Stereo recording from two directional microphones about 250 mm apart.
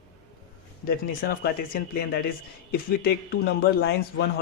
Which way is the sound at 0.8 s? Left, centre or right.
Left.